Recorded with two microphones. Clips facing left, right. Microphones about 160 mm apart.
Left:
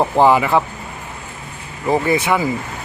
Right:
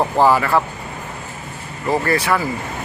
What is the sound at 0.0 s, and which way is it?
Speech, 15° left (ahead or behind).